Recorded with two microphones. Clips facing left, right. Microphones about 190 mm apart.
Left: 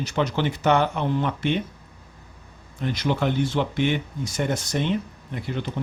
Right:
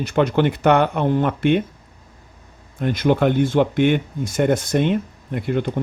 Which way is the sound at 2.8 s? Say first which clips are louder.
Right 7 dB; 55° right (ahead or behind).